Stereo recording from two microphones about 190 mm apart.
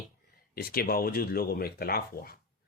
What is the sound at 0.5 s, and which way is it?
Speech, 50° left (ahead or behind).